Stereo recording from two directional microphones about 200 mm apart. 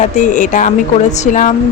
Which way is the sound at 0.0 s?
40° left (ahead or behind).